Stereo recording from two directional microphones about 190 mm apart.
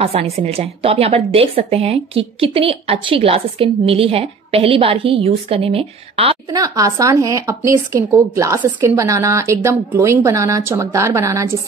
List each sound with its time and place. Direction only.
0.0 s a woman's voice: 30° right (ahead or behind)
6.6 s a woman's voice: 15° right (ahead or behind)